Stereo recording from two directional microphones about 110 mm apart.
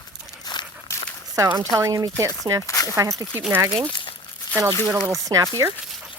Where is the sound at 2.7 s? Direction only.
30° left (ahead or behind).